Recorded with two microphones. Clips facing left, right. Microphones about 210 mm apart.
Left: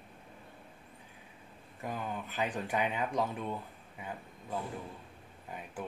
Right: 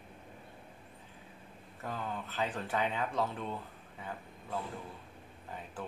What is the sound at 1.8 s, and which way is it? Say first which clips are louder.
Speech: left 1 dB; 15° left (ahead or behind).